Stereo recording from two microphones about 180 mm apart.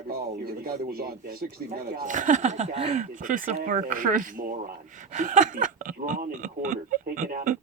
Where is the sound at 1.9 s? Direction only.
45° right (ahead or behind).